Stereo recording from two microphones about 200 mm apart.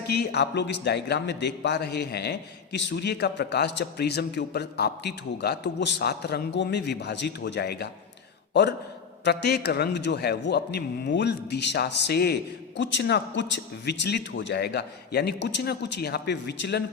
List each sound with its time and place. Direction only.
0.1 s a man's voice: 55° left (ahead or behind)
9.2 s a man's voice: 55° left (ahead or behind)